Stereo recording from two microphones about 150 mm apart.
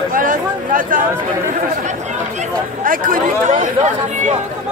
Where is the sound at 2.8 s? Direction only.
65° right (ahead or behind).